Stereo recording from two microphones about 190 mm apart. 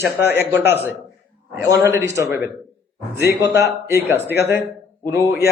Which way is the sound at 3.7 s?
15° right (ahead or behind).